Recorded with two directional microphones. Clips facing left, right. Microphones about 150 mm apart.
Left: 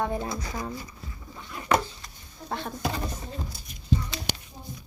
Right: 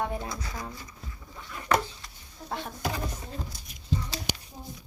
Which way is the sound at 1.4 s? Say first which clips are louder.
Left 2 dB; 20° left (ahead or behind).